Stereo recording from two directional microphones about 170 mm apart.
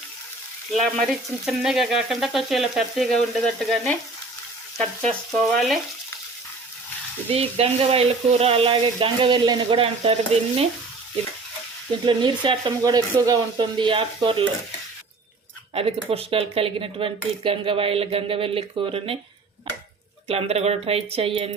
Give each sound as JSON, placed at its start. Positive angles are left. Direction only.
{"t": 0.7, "sound": "frying", "side_deg": 0}
{"t": 5.0, "sound": "frying", "side_deg": 0}
{"t": 7.3, "sound": "speech", "side_deg": -35}
{"t": 12.0, "sound": "speech", "side_deg": -30}
{"t": 15.7, "sound": "speech", "side_deg": -35}
{"t": 20.2, "sound": "speech", "side_deg": -35}